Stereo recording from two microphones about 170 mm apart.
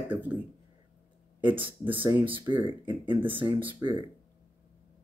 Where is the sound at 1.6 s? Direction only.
30° right (ahead or behind).